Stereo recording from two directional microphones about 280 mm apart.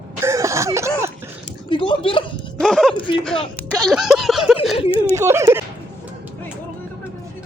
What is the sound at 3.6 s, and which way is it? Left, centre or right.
Music, centre.